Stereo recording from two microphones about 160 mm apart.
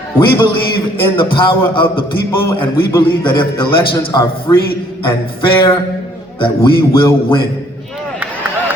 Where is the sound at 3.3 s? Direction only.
30° left (ahead or behind).